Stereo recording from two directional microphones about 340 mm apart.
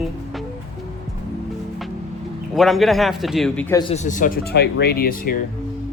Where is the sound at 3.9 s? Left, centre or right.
Left.